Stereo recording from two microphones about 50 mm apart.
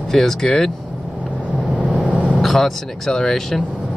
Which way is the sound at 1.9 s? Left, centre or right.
Centre.